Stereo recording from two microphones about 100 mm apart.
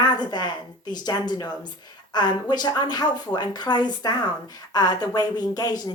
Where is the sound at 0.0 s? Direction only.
45° left (ahead or behind).